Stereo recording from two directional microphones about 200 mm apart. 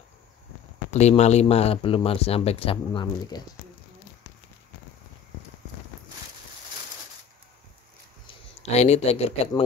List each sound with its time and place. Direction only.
0.9 s speech: 35° left (ahead or behind)
8.7 s speech: 35° left (ahead or behind)